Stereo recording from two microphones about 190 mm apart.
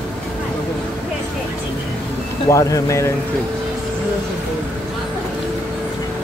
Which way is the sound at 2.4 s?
15° left (ahead or behind).